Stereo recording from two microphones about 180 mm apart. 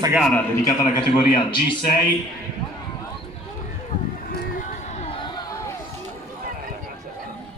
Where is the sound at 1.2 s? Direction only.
25° left (ahead or behind).